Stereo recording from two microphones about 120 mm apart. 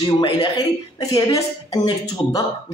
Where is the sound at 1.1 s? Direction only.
30° left (ahead or behind).